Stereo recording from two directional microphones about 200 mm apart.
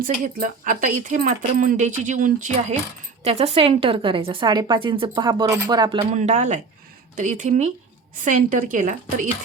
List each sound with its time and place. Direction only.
0.0 s a woman's voice: 45° right (ahead or behind)